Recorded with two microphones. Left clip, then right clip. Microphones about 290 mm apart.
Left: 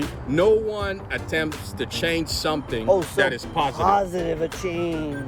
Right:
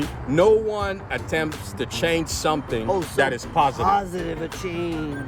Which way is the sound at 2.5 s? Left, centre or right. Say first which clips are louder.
Left 2 dB; centre.